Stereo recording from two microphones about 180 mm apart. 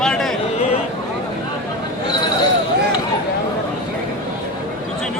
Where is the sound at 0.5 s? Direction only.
35° left (ahead or behind).